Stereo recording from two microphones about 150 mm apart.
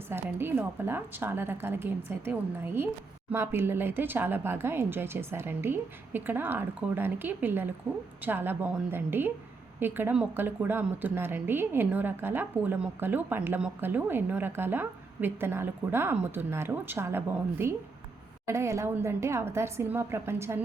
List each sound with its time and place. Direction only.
0.1 s a woman's voice: 15° right (ahead or behind)